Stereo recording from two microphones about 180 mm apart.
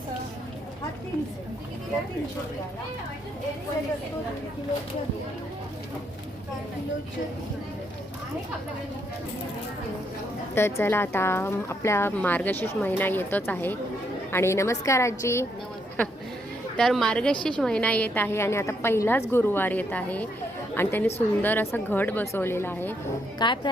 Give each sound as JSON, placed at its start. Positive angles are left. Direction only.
{"t": 10.5, "sound": "speech", "side_deg": 15}
{"t": 16.7, "sound": "a woman's voice", "side_deg": 0}
{"t": 23.4, "sound": "a woman's voice", "side_deg": 25}